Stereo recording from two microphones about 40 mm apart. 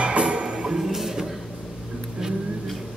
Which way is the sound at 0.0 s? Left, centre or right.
Right.